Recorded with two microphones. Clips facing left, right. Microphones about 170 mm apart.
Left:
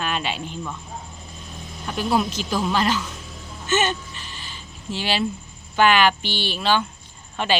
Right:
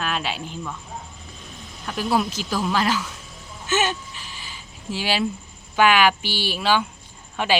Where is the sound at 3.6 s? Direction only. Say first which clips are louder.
Left 1 dB; 5° right (ahead or behind).